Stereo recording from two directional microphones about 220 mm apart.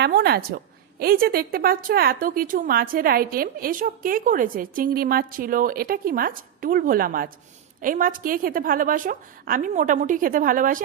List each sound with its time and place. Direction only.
0.0 s a woman's voice: 45° right (ahead or behind)